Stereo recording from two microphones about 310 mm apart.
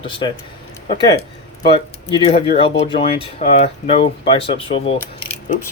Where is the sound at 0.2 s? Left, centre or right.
Centre.